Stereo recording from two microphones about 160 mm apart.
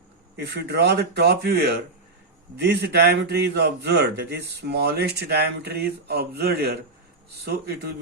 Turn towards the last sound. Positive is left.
turn(degrees=-85)